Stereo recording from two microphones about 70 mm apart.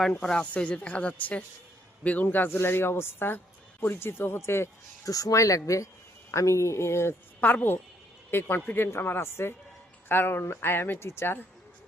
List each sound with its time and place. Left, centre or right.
0.0 s a woman's voice: centre; by 4.7 s left
5.0 s speech: left
7.4 s a woman's voice: left